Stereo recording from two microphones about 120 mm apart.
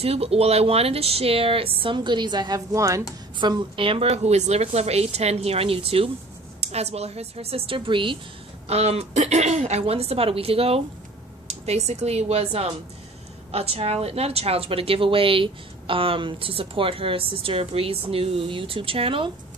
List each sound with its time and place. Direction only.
0.0 s a woman's voice: 55° right (ahead or behind); by 3.1 s 25° right (ahead or behind)
3.3 s a woman's voice: 40° right (ahead or behind)
8.6 s a woman's voice: 60° right (ahead or behind)